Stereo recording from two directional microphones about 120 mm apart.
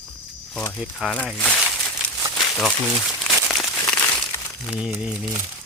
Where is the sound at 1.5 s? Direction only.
Centre (ahead or behind).